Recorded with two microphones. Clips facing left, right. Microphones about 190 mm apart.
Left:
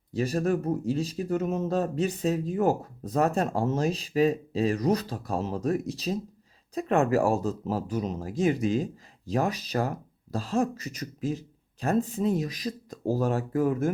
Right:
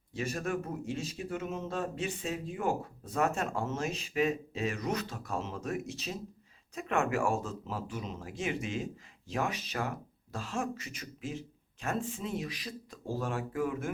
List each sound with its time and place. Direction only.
0.1 s speech: 35° left (ahead or behind)